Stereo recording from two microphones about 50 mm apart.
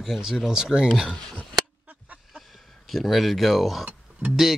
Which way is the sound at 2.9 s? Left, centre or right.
Centre.